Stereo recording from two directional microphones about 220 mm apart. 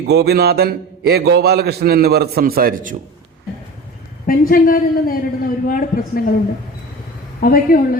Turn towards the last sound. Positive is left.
turn(degrees=40)  # may be behind; listen again after turning